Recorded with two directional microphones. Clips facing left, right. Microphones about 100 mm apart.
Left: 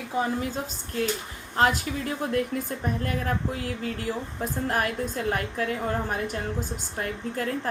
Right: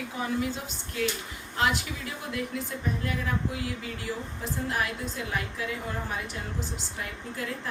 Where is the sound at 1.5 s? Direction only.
40° left (ahead or behind).